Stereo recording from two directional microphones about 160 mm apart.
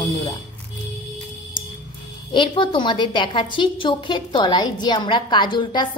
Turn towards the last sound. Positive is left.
turn(degrees=30)  # may be behind; listen again after turning